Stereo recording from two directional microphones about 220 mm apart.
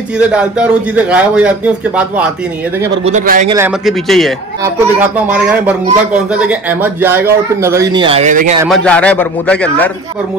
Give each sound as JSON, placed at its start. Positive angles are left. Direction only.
{"t": 0.2, "sound": "a man's voice", "side_deg": -5}
{"t": 3.1, "sound": "speech", "side_deg": -35}
{"t": 3.4, "sound": "a man's voice", "side_deg": -15}
{"t": 3.8, "sound": "a man's voice", "side_deg": 0}
{"t": 5.7, "sound": "a man's voice", "side_deg": -5}
{"t": 8.6, "sound": "a man's voice", "side_deg": 5}